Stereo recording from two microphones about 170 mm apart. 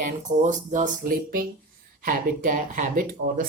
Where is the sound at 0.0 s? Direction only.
45° right (ahead or behind).